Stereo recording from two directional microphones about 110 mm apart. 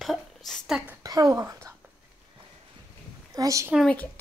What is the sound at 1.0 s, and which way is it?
Speech, 35° right (ahead or behind).